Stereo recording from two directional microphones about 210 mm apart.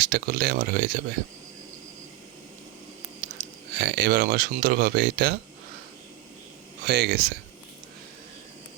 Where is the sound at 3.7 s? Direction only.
55° right (ahead or behind).